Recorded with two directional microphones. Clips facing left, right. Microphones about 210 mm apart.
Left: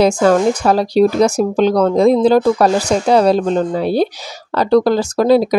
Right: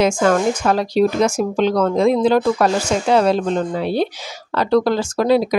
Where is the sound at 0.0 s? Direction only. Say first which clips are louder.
Left 4 dB; 35° left (ahead or behind).